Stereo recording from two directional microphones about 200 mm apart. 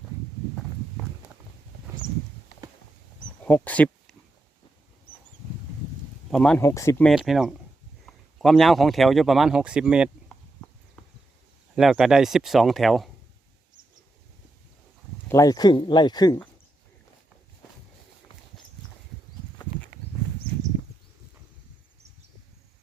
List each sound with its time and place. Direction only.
3.4 s speech: 5° left (ahead or behind)
6.3 s speech: 5° left (ahead or behind)
6.6 s speech: 15° left (ahead or behind)
7.1 s speech: centre (ahead or behind)
11.0 s a sound: 5° left (ahead or behind)
11.8 s speech: centre (ahead or behind)
15.3 s speech: 15° left (ahead or behind)